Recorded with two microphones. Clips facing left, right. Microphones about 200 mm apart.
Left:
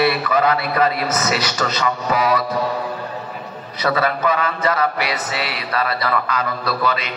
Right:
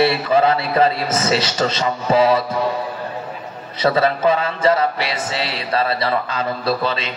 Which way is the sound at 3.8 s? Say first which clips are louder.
Right 3 dB; 25° right (ahead or behind).